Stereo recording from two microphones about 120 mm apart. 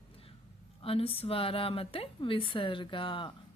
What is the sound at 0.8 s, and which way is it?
A woman's voice, 50° left (ahead or behind).